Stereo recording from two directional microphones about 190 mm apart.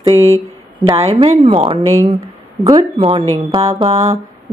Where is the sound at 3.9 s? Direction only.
35° right (ahead or behind).